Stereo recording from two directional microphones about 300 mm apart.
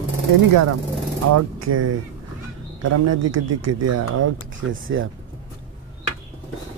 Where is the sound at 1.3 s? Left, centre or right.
Right.